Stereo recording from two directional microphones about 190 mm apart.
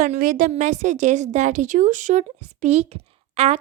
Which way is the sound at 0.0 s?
45° right (ahead or behind).